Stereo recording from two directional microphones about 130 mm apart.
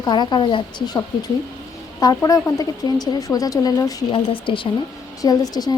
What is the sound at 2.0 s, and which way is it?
Speech, 25° left (ahead or behind).